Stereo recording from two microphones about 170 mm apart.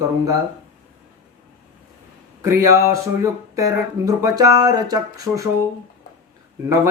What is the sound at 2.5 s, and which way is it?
Speech, 15° right (ahead or behind).